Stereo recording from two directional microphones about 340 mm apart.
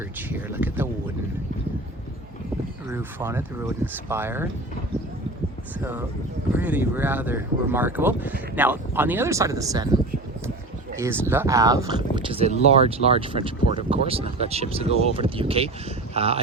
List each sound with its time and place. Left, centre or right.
0.2 s speech: centre
2.9 s speech: centre
5.8 s speech: centre
11.0 s speech: centre